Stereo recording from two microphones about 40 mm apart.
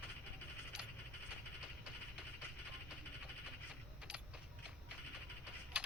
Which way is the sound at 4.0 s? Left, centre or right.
Right.